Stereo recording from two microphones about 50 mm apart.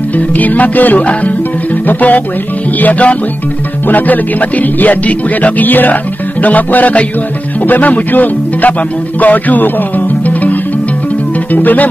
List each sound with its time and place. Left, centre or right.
0.4 s music: left
11.5 s music: left